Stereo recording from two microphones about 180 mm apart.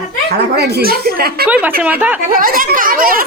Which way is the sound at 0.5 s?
60° right (ahead or behind).